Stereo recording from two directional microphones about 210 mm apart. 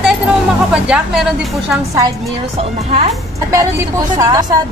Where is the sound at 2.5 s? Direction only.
30° right (ahead or behind).